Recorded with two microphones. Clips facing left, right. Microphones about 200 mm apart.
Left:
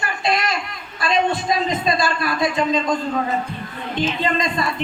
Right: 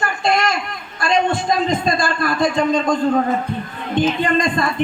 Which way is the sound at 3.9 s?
50° right (ahead or behind).